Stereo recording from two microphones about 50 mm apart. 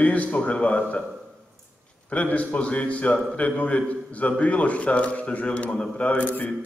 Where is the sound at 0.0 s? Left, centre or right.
Left.